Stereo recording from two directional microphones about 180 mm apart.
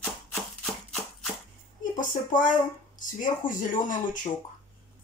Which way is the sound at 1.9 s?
45° left (ahead or behind).